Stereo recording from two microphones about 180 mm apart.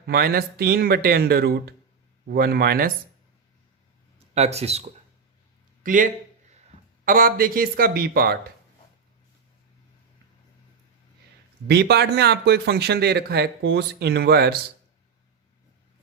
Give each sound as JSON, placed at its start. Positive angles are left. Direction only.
{"t": 0.0, "sound": "speech", "side_deg": -60}
{"t": 4.4, "sound": "speech", "side_deg": -35}
{"t": 5.8, "sound": "speech", "side_deg": -45}
{"t": 11.7, "sound": "speech", "side_deg": -65}